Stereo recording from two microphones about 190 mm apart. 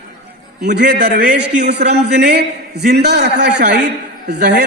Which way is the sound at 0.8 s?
60° right (ahead or behind).